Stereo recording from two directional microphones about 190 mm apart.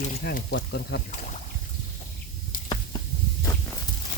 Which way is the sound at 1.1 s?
40° left (ahead or behind).